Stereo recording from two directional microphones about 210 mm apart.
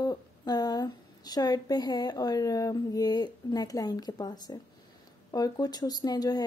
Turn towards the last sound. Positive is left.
turn(degrees=20)  # may be behind; listen again after turning